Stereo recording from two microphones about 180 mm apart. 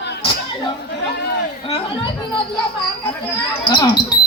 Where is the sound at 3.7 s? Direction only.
25° left (ahead or behind).